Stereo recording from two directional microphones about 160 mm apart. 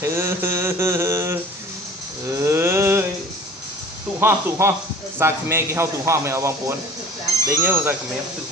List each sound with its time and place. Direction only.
0.0 s mantra: 15° right (ahead or behind)
2.3 s a sound: 15° right (ahead or behind)
4.2 s a man's voice: 15° right (ahead or behind)